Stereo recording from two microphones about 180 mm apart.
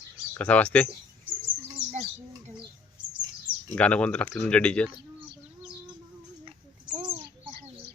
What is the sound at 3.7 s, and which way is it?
Speech, 5° left (ahead or behind).